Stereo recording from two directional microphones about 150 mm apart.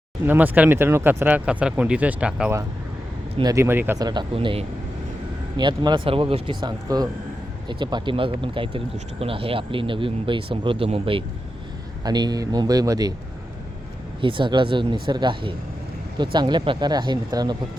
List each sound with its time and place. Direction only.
0.3 s speech: 10° right (ahead or behind)
4.0 s speech: 30° right (ahead or behind)
12.0 s speech: 25° right (ahead or behind)
14.2 s speech: 35° right (ahead or behind)